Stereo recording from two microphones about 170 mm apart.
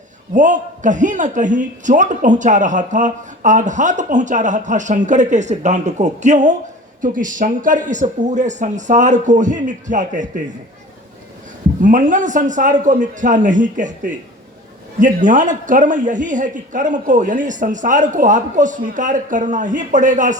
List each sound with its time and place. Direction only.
0.3 s a man's voice: 45° right (ahead or behind)
11.8 s a man's voice: 50° right (ahead or behind)